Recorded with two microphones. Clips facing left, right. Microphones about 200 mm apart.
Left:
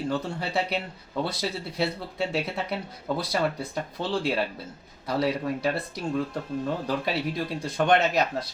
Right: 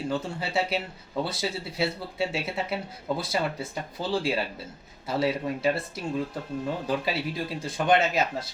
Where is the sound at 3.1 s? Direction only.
Centre (ahead or behind).